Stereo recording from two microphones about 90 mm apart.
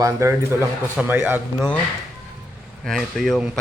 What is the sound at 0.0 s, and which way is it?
Speech, 35° right (ahead or behind).